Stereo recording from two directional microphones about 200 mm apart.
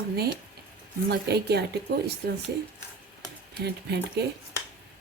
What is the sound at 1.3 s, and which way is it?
Speech, 55° right (ahead or behind).